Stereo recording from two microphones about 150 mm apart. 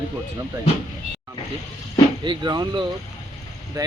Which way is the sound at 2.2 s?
30° right (ahead or behind).